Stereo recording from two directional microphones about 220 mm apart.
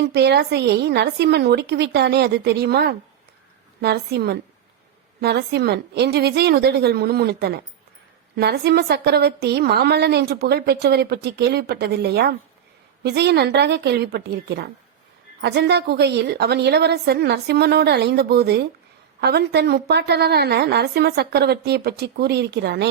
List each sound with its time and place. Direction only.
0.0 s a woman's voice: 50° right (ahead or behind)